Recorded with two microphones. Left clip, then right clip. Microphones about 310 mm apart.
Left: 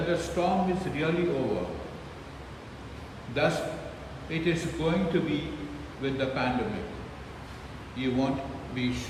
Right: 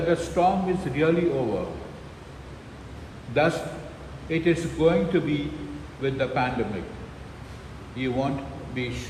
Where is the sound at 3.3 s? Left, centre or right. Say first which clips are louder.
Right 4 dB; right.